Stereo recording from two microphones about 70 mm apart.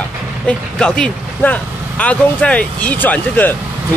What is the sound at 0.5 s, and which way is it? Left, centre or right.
Speech, centre.